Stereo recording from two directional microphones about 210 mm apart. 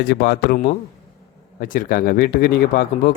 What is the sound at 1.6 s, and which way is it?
Speech, 40° left (ahead or behind).